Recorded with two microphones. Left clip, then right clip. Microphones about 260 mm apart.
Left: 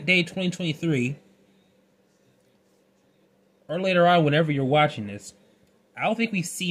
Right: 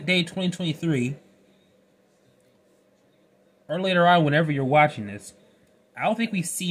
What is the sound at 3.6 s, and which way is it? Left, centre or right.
Speech, centre.